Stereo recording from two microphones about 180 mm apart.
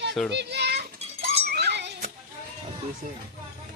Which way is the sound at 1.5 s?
70° right (ahead or behind).